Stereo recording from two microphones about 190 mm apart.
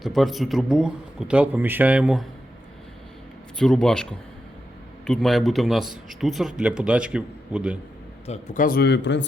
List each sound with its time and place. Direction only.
0.0 s speech: centre (ahead or behind)
3.6 s speech: 5° left (ahead or behind)
8.3 s speech: 40° left (ahead or behind); by 9.2 s 65° left (ahead or behind)